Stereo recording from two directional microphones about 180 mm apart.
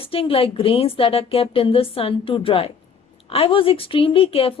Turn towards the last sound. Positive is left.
turn(degrees=30)  # may be behind; listen again after turning